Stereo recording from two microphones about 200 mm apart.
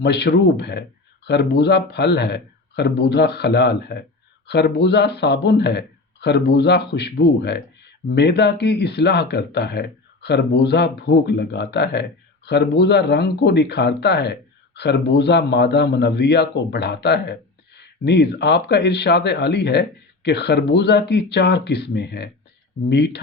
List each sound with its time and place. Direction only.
0.0 s speech: 55° left (ahead or behind)